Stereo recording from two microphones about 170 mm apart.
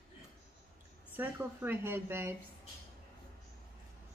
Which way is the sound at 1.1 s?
10° right (ahead or behind).